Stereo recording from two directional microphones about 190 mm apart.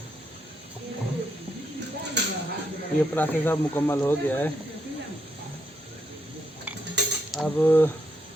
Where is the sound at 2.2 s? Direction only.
65° right (ahead or behind).